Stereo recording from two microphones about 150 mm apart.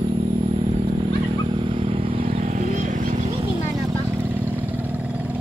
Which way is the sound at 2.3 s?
50° right (ahead or behind).